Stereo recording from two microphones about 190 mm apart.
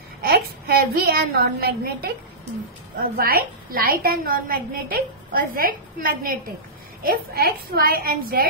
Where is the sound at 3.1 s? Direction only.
50° right (ahead or behind).